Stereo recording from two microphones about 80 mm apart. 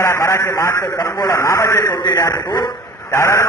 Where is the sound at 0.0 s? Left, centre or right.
Left.